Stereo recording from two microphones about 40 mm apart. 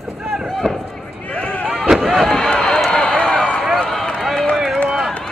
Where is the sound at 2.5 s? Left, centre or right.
Centre.